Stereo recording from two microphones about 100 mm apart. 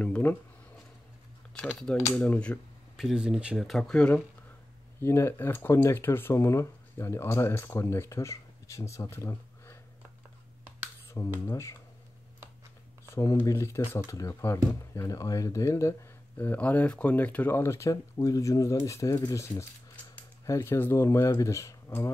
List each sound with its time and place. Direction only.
0.0 s speech: 15° left (ahead or behind)
1.5 s speech: 10° left (ahead or behind)
3.0 s speech: 5° right (ahead or behind)
3.6 s speech: 5° left (ahead or behind)
5.0 s speech: 25° left (ahead or behind)
11.1 s speech: 25° left (ahead or behind)
13.1 s speech: 30° left (ahead or behind)
16.3 s speech: 20° left (ahead or behind)